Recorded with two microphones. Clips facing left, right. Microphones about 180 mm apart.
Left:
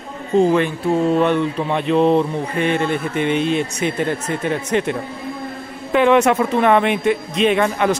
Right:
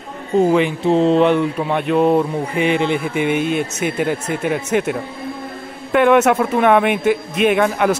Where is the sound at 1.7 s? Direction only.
5° right (ahead or behind).